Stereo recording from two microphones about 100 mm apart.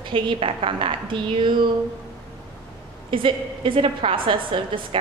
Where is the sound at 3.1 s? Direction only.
60° right (ahead or behind).